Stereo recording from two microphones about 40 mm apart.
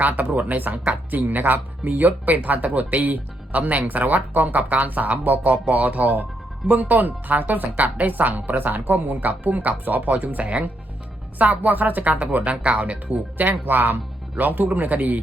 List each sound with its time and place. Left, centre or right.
0.0 s speech: right
12.5 s speech: right
13.3 s speech: right